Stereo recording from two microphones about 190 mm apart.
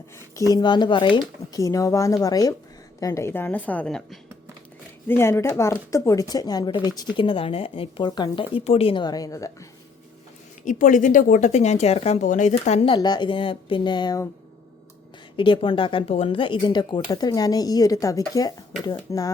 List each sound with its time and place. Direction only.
0.5 s a woman's voice: 25° left (ahead or behind)
10.7 s speech: 45° left (ahead or behind); by 14.3 s 20° left (ahead or behind)
15.4 s speech: 25° left (ahead or behind)